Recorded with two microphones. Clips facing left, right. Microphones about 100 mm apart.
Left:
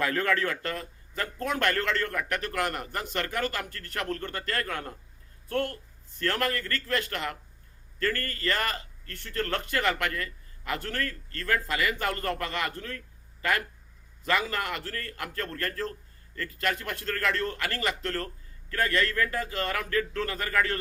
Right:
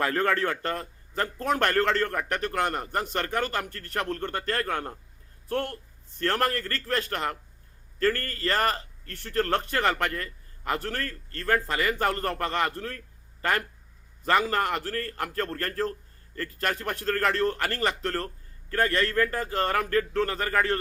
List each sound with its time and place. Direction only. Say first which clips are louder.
0.0 s a man's voice: right 2 dB; 35° right (ahead or behind)